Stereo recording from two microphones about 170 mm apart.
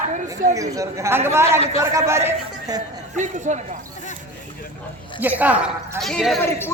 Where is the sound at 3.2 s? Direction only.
45° right (ahead or behind).